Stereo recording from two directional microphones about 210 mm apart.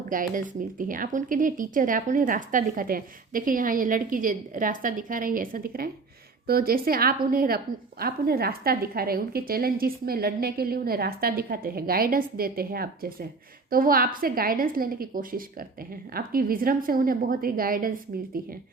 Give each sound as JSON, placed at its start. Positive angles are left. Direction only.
{"t": 0.1, "sound": "a woman's voice", "side_deg": -40}